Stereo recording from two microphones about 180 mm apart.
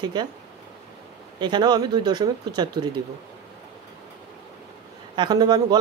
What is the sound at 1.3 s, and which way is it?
Speech, 25° right (ahead or behind).